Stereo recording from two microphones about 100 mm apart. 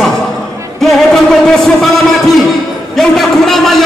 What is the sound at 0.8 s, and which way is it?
Music, 5° left (ahead or behind).